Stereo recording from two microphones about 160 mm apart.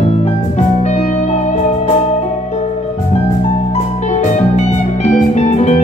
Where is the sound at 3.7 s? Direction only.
40° left (ahead or behind).